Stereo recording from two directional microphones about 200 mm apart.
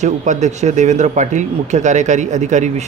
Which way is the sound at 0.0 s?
35° right (ahead or behind).